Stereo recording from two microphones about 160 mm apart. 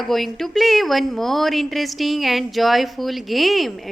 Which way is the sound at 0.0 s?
Centre (ahead or behind).